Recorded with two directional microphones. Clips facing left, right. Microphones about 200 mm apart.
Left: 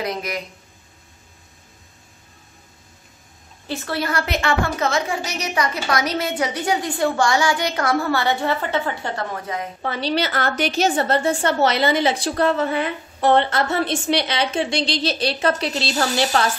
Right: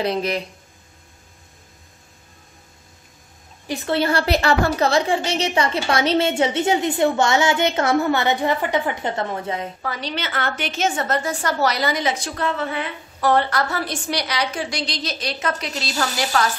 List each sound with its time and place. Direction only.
0.0 s speech: 30° right (ahead or behind)
3.6 s a woman's voice: 20° right (ahead or behind)
9.8 s a woman's voice: 30° left (ahead or behind)
13.2 s a woman's voice: 25° left (ahead or behind)